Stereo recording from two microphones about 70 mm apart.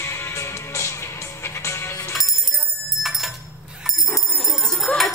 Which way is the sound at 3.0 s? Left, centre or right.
Centre.